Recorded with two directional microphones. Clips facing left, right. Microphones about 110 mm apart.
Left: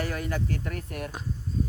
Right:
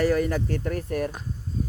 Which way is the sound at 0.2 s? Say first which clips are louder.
Right 6 dB; 40° right (ahead or behind).